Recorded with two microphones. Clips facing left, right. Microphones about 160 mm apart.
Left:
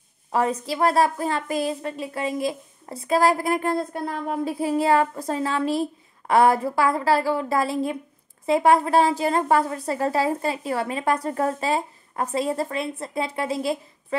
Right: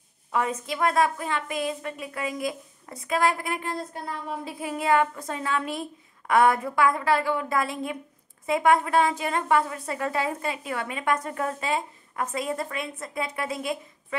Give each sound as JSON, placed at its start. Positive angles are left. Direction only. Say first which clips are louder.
{"t": 0.3, "sound": "a woman's voice", "louder": "left 4 dB", "side_deg": 35}
{"t": 4.6, "sound": "a woman's voice", "louder": "left 3 dB", "side_deg": 30}